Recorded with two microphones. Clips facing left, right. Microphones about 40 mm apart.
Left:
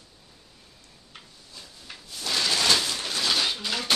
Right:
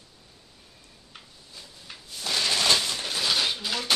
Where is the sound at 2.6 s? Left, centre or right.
Left.